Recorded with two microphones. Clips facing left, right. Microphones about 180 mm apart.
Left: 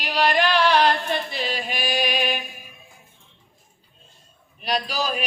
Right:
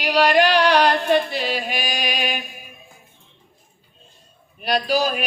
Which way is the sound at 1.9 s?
45° right (ahead or behind).